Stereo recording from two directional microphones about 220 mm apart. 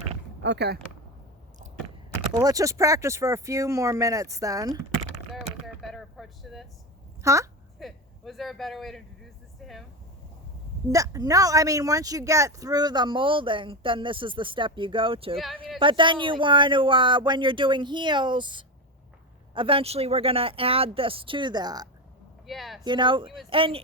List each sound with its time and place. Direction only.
0.4 s speech: 50° right (ahead or behind)
2.3 s speech: 15° right (ahead or behind)
5.3 s a sound: centre (ahead or behind)
7.2 s speech: 15° right (ahead or behind)
7.8 s vehicle: centre (ahead or behind)
10.9 s speech: 15° right (ahead or behind)
22.4 s speech: centre (ahead or behind)
22.8 s speech: 20° right (ahead or behind)